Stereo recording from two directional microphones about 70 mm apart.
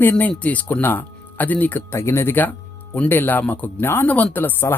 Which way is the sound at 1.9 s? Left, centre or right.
Left.